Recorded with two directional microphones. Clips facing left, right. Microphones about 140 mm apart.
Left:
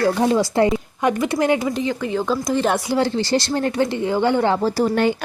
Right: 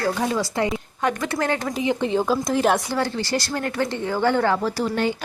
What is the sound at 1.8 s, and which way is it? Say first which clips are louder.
Speech: right 1 dB; 20° right (ahead or behind).